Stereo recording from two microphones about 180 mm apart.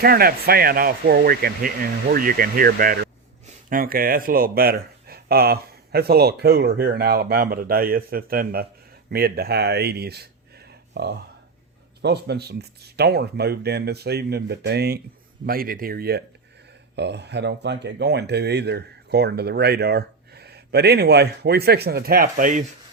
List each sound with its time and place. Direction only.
0.0 s speech: 55° right (ahead or behind)